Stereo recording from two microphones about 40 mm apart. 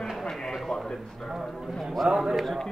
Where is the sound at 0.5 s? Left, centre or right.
Centre.